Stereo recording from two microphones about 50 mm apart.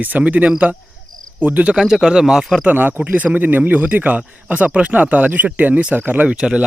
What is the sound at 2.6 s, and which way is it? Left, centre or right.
Speech, right.